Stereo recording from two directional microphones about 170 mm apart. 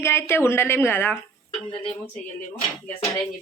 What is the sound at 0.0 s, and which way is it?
A woman's voice, 15° left (ahead or behind).